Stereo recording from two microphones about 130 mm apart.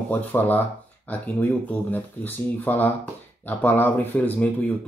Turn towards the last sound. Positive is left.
turn(degrees=10)  # may be behind; listen again after turning